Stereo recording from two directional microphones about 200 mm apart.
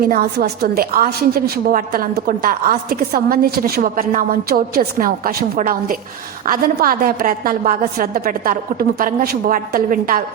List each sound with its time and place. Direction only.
0.0 s a woman's voice: 50° right (ahead or behind)